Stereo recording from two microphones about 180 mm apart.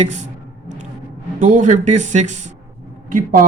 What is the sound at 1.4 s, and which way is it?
A man's voice, 45° right (ahead or behind).